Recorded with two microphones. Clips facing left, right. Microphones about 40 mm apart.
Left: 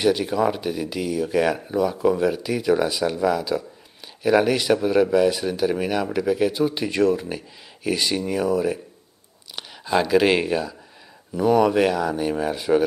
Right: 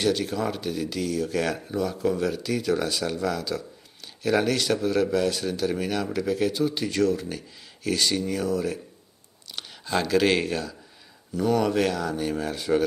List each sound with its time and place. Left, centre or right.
0.0 s speech: centre